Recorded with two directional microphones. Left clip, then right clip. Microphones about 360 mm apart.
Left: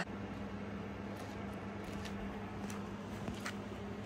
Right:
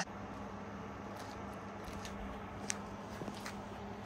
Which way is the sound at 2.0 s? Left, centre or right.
Centre.